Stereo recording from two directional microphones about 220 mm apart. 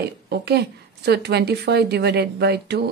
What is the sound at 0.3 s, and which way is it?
A woman's voice, 50° right (ahead or behind).